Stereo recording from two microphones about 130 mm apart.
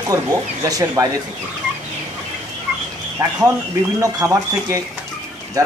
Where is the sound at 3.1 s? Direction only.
25° right (ahead or behind).